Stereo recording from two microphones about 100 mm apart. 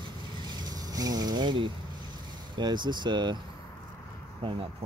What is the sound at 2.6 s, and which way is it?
Speech, 45° right (ahead or behind).